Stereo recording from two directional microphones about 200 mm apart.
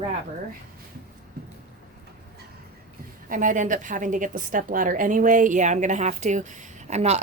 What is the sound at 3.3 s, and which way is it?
A woman's voice, 40° right (ahead or behind).